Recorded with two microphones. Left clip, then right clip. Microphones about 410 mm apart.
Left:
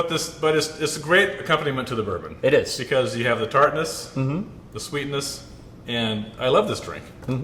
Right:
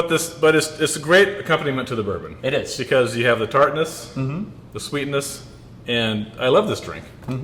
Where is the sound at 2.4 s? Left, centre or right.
Left.